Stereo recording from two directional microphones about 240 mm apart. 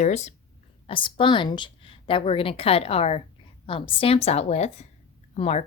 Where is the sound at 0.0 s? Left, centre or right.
Left.